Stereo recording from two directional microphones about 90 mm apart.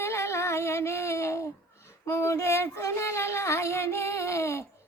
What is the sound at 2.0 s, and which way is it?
Female singing, 35° left (ahead or behind).